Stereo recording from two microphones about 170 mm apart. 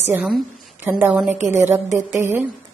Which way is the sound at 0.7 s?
10° right (ahead or behind).